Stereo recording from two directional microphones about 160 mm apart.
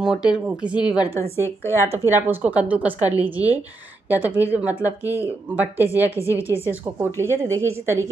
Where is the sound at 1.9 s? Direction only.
15° right (ahead or behind).